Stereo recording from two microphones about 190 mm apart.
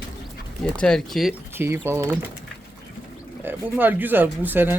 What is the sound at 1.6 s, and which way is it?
Speech, 15° right (ahead or behind).